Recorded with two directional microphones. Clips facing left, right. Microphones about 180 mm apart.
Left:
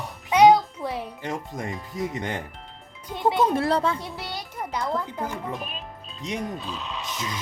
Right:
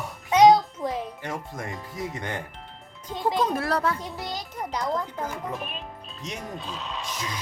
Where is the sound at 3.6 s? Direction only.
30° left (ahead or behind).